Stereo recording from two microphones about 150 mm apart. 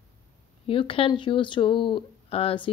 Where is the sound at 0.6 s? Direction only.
35° left (ahead or behind).